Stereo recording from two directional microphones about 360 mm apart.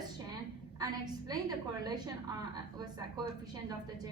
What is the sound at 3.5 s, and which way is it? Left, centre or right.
Speech, centre.